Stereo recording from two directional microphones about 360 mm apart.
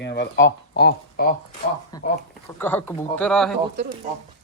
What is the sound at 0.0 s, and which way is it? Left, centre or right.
Speech, left.